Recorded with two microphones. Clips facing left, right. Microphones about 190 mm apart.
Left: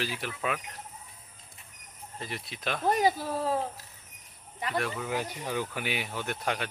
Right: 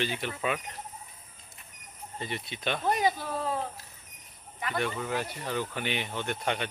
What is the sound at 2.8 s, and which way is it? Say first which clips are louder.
Speech: left 3 dB; 35° left (ahead or behind).